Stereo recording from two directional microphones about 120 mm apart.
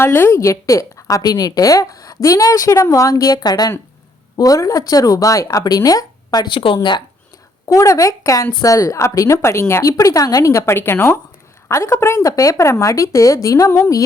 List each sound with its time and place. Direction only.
0.0 s a woman's voice: 20° left (ahead or behind); by 6.7 s 45° left (ahead or behind)
7.7 s a woman's voice: 25° left (ahead or behind)